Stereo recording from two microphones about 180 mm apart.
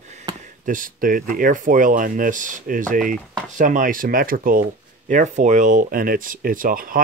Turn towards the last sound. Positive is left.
turn(degrees=-50)  # may be behind; listen again after turning